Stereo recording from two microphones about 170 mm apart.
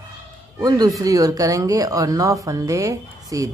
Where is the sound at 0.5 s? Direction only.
20° right (ahead or behind).